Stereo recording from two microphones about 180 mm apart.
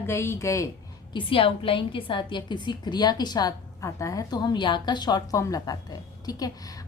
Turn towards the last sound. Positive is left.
turn(degrees=20)  # may be behind; listen again after turning